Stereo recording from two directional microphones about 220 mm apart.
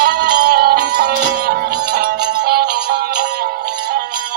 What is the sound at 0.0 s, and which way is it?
Music, 45° right (ahead or behind).